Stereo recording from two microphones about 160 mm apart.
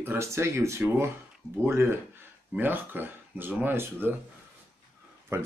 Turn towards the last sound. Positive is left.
turn(degrees=-15)  # may be behind; listen again after turning